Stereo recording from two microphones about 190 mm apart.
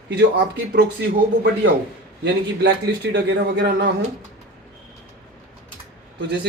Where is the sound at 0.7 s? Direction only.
60° right (ahead or behind).